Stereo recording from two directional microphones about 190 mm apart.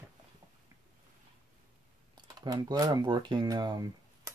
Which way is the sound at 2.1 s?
20° right (ahead or behind).